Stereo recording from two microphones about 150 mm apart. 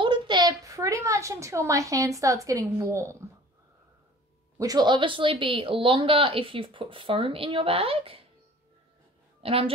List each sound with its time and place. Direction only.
0.0 s a child's voice: 30° right (ahead or behind)
4.6 s speech: 25° right (ahead or behind)
9.4 s a woman's voice: 40° right (ahead or behind)